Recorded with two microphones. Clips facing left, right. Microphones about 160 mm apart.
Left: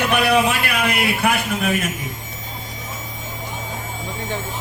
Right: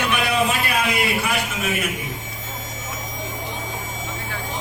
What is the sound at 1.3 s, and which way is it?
Speech, 60° left (ahead or behind).